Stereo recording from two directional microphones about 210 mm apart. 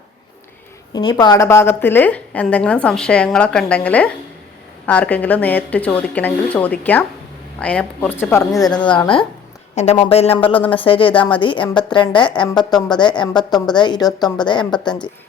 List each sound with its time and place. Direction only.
0.9 s a woman's voice: 20° left (ahead or behind)